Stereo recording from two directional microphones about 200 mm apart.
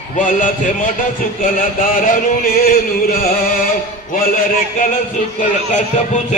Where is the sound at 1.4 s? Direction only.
45° left (ahead or behind).